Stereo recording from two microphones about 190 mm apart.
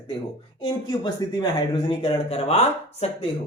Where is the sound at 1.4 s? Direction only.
25° left (ahead or behind).